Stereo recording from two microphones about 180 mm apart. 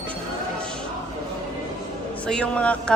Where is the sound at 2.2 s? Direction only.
5° left (ahead or behind).